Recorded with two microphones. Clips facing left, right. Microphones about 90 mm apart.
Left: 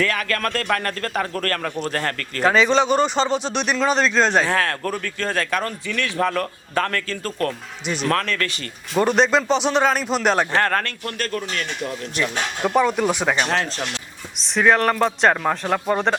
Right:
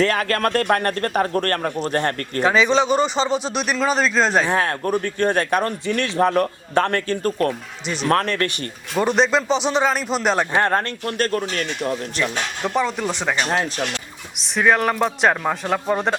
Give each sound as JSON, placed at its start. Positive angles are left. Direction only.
{"t": 0.0, "sound": "a man's voice", "side_deg": -35}
{"t": 2.4, "sound": "speech", "side_deg": 0}
{"t": 4.4, "sound": "a man's voice", "side_deg": -20}
{"t": 9.0, "sound": "speech", "side_deg": 0}
{"t": 10.5, "sound": "a man's voice", "side_deg": -20}
{"t": 12.3, "sound": "speech", "side_deg": 5}
{"t": 13.5, "sound": "speech", "side_deg": -10}